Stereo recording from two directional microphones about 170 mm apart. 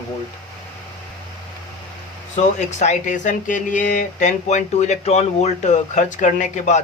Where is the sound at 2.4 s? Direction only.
45° left (ahead or behind).